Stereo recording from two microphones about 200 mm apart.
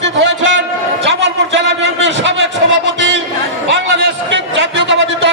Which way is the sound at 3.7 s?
60° right (ahead or behind).